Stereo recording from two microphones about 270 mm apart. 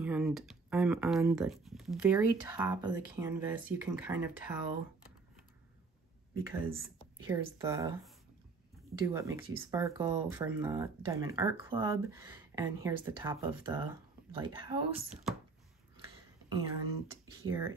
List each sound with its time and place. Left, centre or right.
0.0 s speech: centre
7.2 s speech: centre
9.0 s speech: centre
16.4 s speech: centre